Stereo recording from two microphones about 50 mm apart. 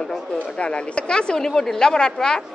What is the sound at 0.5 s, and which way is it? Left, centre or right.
A woman's voice, left.